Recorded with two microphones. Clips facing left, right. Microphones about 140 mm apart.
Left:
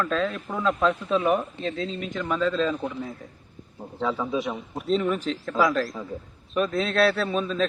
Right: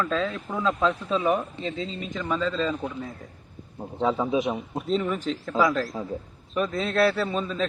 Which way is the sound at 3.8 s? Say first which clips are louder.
Right 3 dB; 25° right (ahead or behind).